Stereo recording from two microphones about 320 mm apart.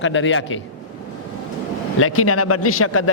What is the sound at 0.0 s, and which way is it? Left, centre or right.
Speech, left.